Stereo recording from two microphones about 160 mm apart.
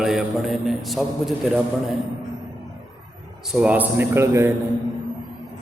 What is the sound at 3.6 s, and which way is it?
Speech, 10° right (ahead or behind).